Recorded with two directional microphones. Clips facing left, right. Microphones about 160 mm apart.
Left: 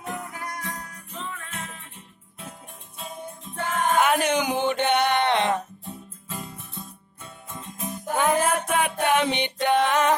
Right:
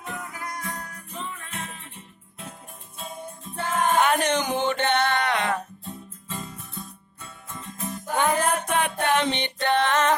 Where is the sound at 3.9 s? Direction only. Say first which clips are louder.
Left 1 dB; 5° left (ahead or behind); by 5.9 s 25° left (ahead or behind).